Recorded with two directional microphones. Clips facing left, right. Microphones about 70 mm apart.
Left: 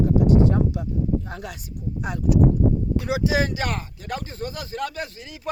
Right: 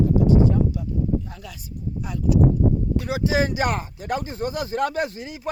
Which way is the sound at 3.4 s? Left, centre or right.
Centre.